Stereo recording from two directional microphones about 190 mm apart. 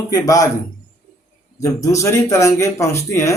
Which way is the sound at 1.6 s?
15° left (ahead or behind).